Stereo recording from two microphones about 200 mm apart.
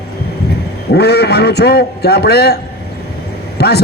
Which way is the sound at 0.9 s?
55° left (ahead or behind).